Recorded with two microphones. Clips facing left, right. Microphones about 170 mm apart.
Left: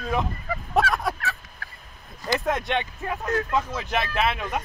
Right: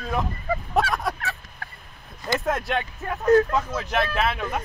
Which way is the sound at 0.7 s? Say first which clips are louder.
Left 2 dB; centre (ahead or behind).